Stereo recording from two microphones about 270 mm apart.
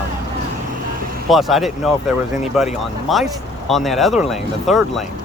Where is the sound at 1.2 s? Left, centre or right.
Centre.